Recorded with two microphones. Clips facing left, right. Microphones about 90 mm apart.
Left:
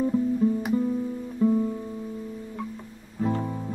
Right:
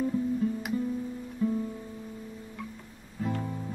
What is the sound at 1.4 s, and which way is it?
Music, 25° left (ahead or behind).